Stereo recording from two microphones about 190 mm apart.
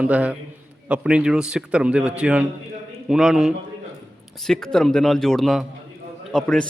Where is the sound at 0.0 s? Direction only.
5° right (ahead or behind).